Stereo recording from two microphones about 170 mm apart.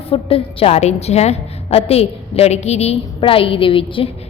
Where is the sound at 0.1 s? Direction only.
35° left (ahead or behind).